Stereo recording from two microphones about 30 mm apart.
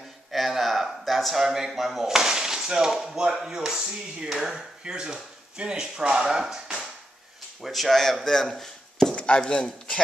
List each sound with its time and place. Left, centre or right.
0.3 s a sound: centre
1.4 s speech: centre
2.9 s speech: centre
3.2 s speech: right
7.6 s speech: centre
9.1 s chopping: left
9.5 s speech: left